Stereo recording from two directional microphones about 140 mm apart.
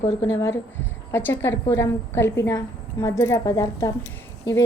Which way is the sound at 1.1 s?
15° left (ahead or behind).